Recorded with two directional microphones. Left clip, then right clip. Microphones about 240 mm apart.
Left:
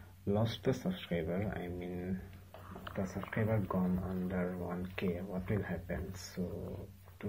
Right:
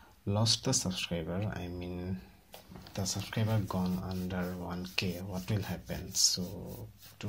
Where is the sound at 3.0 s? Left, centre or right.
Right.